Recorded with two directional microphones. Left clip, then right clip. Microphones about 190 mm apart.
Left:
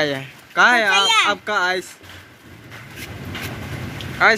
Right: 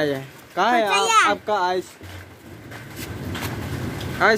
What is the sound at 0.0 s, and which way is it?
Speech, 10° left (ahead or behind).